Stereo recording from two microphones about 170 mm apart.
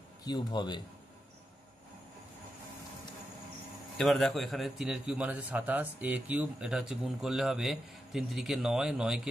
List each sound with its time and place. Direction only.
0.2 s a man's voice: 25° left (ahead or behind)
4.0 s a man's voice: centre (ahead or behind)